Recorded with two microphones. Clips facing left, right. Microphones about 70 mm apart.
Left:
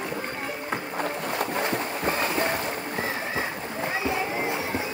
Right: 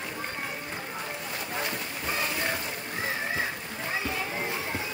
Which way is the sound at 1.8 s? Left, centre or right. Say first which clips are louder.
Left 6 dB; left.